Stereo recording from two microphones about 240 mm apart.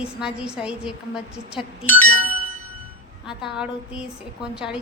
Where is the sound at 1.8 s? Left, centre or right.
Left.